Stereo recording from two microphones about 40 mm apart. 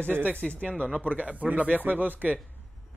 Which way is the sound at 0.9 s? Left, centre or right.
Right.